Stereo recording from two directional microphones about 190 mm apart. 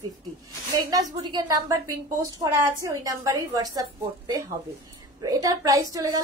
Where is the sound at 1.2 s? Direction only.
20° right (ahead or behind).